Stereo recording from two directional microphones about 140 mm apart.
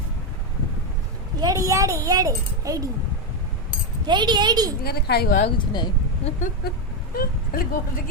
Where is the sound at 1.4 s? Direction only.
25° right (ahead or behind).